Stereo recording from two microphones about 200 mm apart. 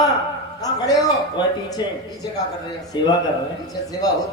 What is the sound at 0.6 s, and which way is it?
A man's voice, 20° left (ahead or behind).